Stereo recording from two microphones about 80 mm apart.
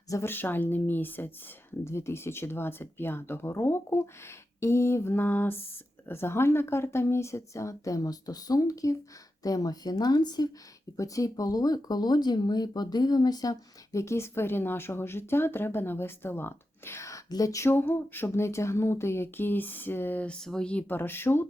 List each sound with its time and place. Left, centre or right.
0.3 s speech: left
10.9 s speech: left
14.0 s speech: left
17.7 s speech: left